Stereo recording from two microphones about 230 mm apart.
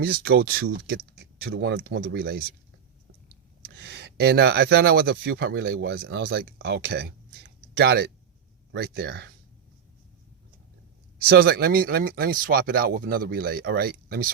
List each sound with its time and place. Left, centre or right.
0.0 s speech: right
3.6 s speech: right
11.3 s speech: right